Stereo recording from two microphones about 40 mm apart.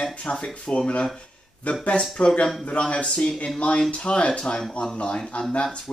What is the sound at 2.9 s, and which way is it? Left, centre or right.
Speech, left.